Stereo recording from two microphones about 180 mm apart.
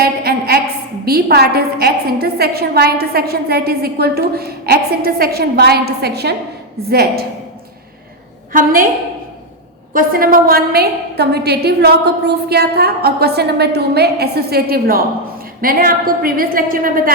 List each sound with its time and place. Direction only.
0.0 s a sound: 60° right (ahead or behind)
1.0 s a woman's voice: 60° right (ahead or behind)
8.5 s a woman's voice: 50° right (ahead or behind)
9.9 s a woman's voice: 50° right (ahead or behind)